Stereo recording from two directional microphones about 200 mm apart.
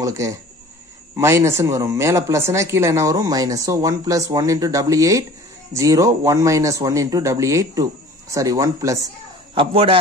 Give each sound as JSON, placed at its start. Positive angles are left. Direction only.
{"t": 0.0, "sound": "speech", "side_deg": -15}
{"t": 9.6, "sound": "a man's voice", "side_deg": -25}